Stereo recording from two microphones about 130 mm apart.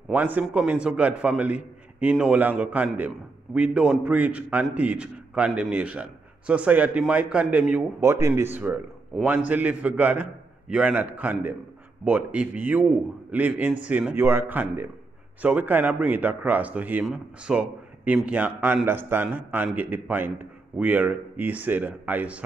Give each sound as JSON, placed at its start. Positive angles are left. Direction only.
{"t": 0.1, "sound": "a man's voice", "side_deg": -10}